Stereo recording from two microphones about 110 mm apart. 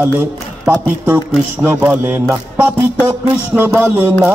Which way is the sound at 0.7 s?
15° right (ahead or behind).